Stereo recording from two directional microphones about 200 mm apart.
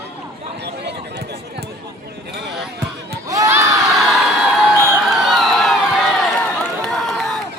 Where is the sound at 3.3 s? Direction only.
15° right (ahead or behind).